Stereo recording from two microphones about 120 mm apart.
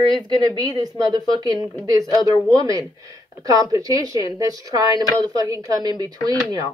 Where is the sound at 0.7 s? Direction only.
35° right (ahead or behind).